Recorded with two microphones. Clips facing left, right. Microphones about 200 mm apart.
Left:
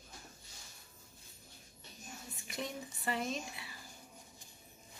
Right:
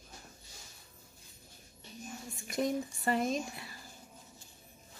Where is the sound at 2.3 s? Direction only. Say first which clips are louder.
Right 10 dB; 45° right (ahead or behind).